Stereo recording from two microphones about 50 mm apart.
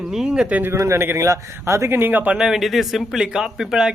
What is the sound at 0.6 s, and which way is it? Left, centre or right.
Speech, right.